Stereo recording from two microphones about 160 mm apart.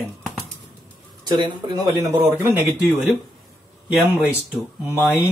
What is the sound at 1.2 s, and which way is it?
Speech, 30° right (ahead or behind).